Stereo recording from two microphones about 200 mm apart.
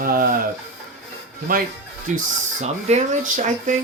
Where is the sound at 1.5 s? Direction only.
45° right (ahead or behind).